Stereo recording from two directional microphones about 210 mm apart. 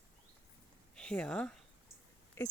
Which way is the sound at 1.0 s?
5° left (ahead or behind).